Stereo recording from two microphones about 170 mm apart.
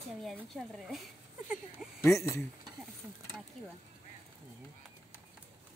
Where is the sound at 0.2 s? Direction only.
Centre (ahead or behind).